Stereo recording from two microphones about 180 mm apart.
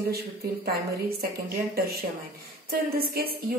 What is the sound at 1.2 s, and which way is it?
A woman's voice, 60° right (ahead or behind).